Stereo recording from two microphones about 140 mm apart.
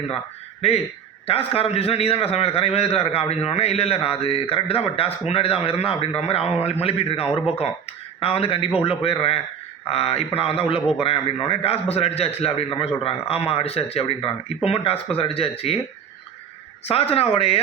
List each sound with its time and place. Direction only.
1.3 s a man's voice: 45° left (ahead or behind)
16.8 s a man's voice: 45° left (ahead or behind)